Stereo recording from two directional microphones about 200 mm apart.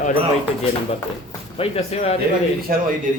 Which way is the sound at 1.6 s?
30° left (ahead or behind).